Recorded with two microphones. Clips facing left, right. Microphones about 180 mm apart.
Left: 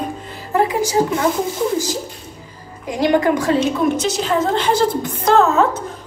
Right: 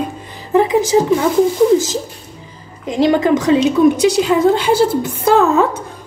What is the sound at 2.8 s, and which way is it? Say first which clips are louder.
A woman's voice: right 3 dB; 25° right (ahead or behind).